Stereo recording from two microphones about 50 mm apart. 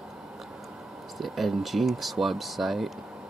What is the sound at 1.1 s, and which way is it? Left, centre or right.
Speech, centre.